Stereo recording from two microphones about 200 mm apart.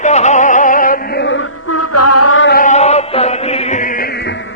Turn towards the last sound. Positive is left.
turn(degrees=60)  # may be behind; listen again after turning